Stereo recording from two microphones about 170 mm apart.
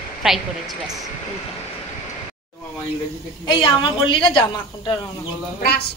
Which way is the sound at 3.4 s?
30° left (ahead or behind).